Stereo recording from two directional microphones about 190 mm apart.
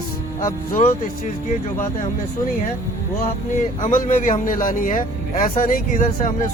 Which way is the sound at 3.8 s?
40° left (ahead or behind).